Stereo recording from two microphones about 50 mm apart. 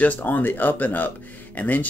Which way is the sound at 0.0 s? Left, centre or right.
Left.